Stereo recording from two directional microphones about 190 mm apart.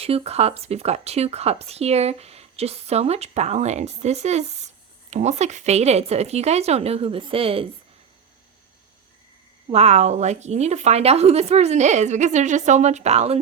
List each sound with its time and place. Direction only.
0.0 s speech: 30° right (ahead or behind)
9.6 s speech: 35° right (ahead or behind)